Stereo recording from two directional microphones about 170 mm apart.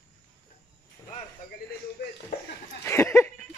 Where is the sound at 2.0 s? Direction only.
75° left (ahead or behind).